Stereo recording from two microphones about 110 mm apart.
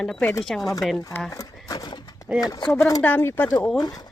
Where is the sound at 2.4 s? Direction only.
35° left (ahead or behind).